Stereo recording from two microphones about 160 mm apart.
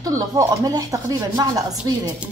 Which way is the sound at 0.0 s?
20° right (ahead or behind).